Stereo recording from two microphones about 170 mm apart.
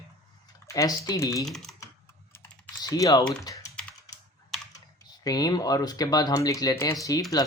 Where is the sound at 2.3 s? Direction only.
20° left (ahead or behind).